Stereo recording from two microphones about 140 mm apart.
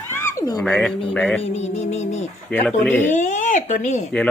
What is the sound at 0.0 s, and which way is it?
Cat, 15° left (ahead or behind).